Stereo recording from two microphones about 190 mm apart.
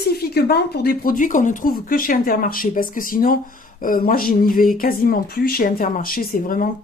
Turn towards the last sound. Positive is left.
turn(degrees=45)  # may be behind; listen again after turning